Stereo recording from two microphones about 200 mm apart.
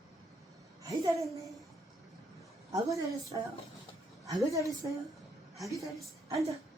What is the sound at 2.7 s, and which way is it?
Speech, 15° right (ahead or behind).